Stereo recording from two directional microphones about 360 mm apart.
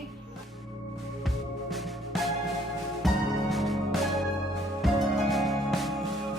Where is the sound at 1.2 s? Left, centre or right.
Centre.